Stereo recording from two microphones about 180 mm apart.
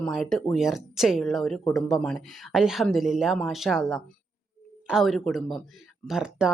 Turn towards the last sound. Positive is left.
turn(degrees=-5)  # may be behind; listen again after turning